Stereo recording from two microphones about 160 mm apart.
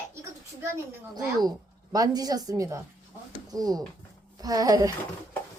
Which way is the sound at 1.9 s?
20° right (ahead or behind).